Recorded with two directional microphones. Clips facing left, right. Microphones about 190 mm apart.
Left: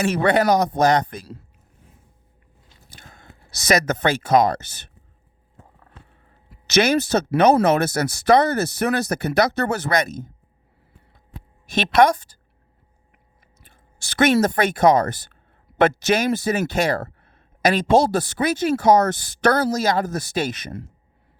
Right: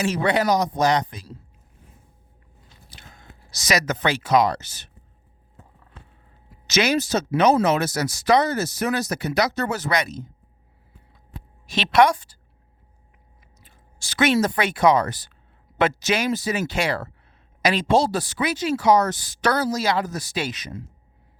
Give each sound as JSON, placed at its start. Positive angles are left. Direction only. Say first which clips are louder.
{"t": 0.0, "sound": "speech", "louder": "left 3 dB", "side_deg": 60}
{"t": 2.9, "sound": "speech", "louder": "left 1 dB", "side_deg": 55}
{"t": 6.5, "sound": "speech", "louder": "left 3 dB", "side_deg": 60}
{"t": 11.6, "sound": "a woman's voice", "louder": "left 1 dB", "side_deg": 50}
{"t": 13.6, "sound": "speech", "louder": "left 1 dB", "side_deg": 55}